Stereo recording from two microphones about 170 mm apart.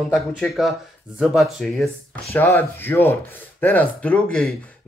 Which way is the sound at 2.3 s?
10° left (ahead or behind).